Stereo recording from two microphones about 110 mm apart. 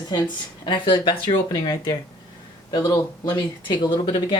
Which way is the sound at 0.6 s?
45° left (ahead or behind).